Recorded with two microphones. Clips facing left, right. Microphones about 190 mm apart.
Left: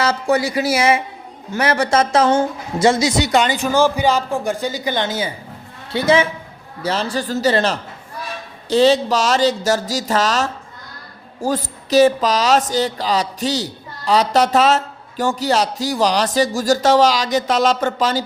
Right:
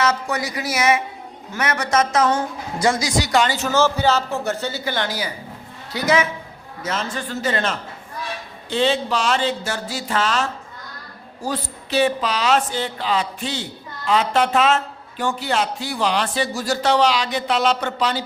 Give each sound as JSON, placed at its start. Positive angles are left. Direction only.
{"t": 0.0, "sound": "speech", "side_deg": 30}